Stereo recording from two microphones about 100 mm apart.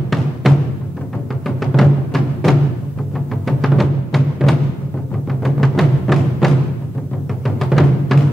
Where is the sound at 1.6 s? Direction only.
Centre (ahead or behind).